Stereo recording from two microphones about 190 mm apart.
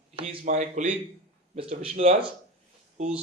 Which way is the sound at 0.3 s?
40° right (ahead or behind).